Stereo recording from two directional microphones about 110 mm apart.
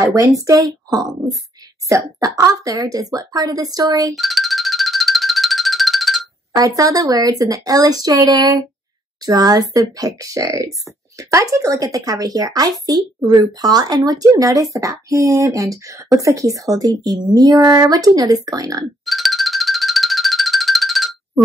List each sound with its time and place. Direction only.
0.0 s a woman's voice: 30° right (ahead or behind)
4.1 s music: centre (ahead or behind)
6.5 s a woman's voice: 35° right (ahead or behind)
19.0 s music: centre (ahead or behind)